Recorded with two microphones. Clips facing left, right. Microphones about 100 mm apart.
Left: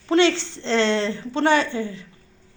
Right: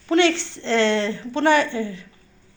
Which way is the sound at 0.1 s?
25° left (ahead or behind).